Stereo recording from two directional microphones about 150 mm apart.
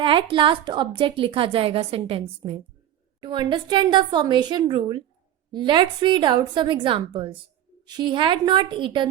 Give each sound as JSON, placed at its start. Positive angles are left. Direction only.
{"t": 0.0, "sound": "a woman's voice", "side_deg": -35}